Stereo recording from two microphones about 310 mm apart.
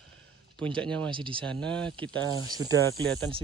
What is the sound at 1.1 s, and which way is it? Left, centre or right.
Speech, centre.